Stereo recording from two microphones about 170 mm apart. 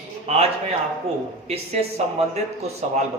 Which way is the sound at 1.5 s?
40° right (ahead or behind).